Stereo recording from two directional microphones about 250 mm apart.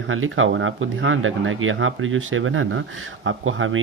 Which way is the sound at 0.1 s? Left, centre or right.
Right.